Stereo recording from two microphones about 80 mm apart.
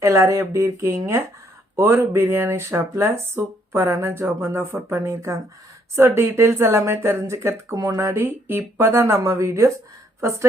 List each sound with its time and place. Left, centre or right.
0.0 s a woman's voice: right